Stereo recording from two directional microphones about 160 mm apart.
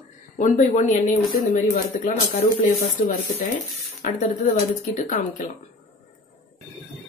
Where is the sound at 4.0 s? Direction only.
55° left (ahead or behind).